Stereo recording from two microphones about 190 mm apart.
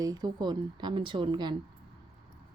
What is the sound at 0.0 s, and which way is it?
A woman's voice, 20° right (ahead or behind).